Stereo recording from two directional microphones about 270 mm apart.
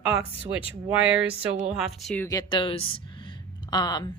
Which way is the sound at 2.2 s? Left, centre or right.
Centre.